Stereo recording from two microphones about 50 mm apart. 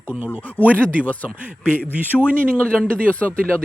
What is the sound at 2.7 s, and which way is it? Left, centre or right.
Speech, left.